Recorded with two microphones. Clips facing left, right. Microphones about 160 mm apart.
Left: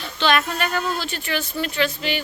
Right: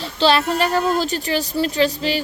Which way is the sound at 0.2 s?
35° right (ahead or behind).